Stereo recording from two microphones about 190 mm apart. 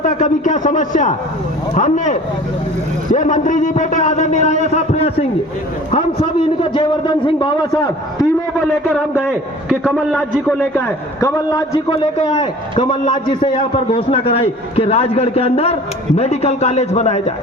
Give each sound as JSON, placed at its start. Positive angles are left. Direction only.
{"t": 0.0, "sound": "a man's voice", "side_deg": 40}
{"t": 8.9, "sound": "a man's voice", "side_deg": 0}